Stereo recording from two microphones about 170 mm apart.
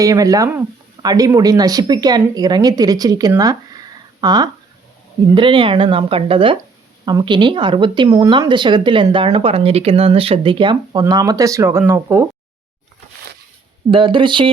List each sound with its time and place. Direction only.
0.0 s speech: 20° right (ahead or behind)
13.9 s speech: 30° right (ahead or behind)